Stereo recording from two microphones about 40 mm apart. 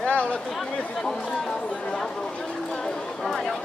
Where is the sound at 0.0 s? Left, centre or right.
Left.